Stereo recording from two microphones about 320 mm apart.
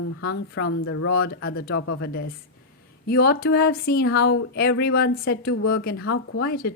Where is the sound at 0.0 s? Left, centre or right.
Left.